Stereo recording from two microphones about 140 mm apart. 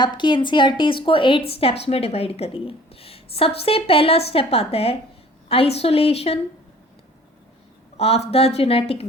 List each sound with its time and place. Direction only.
0.0 s speech: 35° left (ahead or behind)
7.9 s speech: 45° left (ahead or behind)